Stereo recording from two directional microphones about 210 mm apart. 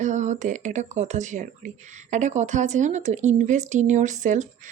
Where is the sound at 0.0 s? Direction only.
35° right (ahead or behind).